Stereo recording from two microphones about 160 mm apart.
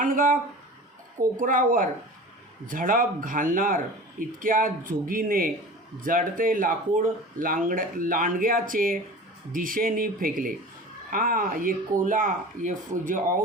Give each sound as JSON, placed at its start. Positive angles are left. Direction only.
{"t": 0.0, "sound": "speech", "side_deg": -55}
{"t": 1.4, "sound": "speech", "side_deg": -60}